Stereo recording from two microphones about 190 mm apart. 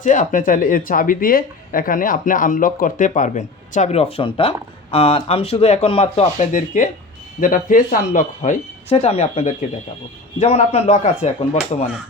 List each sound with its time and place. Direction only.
0.0 s speech: 40° left (ahead or behind)